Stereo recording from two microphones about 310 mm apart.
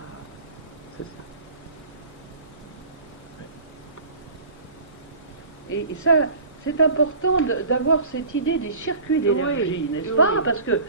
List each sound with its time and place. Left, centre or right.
6.1 s a woman's voice: left
8.0 s speech: left
8.9 s speech: left
9.6 s speech: left
10.1 s a woman's voice: left